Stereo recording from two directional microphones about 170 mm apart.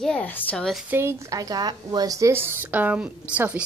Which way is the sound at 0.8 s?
15° right (ahead or behind).